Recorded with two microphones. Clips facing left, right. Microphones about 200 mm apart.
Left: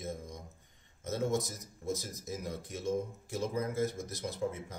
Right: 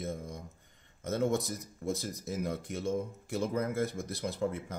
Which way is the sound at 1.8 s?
60° right (ahead or behind).